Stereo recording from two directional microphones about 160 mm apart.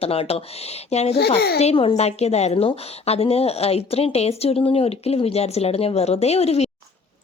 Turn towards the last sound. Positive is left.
turn(degrees=40)  # may be behind; listen again after turning